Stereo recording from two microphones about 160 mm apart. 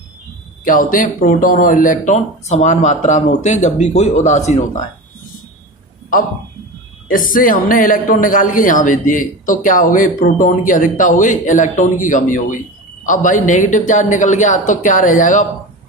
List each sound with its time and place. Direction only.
0.6 s speech: 60° left (ahead or behind)
7.1 s a man's voice: 60° left (ahead or behind)